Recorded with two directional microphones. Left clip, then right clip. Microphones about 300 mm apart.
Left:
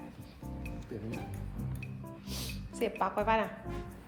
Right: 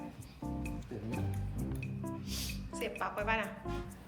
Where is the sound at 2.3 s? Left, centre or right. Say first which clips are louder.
Even; centre.